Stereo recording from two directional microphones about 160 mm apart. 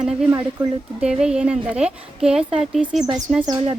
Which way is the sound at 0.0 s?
5° right (ahead or behind).